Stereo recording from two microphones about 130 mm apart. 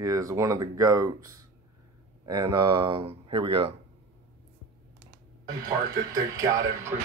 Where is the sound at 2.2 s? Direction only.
35° right (ahead or behind).